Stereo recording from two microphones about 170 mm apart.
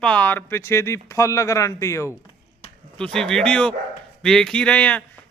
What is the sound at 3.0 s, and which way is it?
A man's voice, 5° left (ahead or behind).